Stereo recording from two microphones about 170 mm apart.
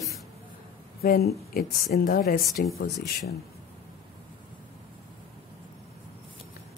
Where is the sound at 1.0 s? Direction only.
65° left (ahead or behind).